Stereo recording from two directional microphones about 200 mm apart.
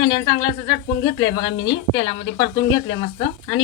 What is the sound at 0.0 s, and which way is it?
Speech, 25° left (ahead or behind).